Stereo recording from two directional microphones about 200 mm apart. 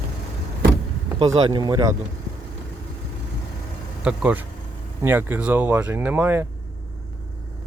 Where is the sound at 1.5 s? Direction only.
20° right (ahead or behind).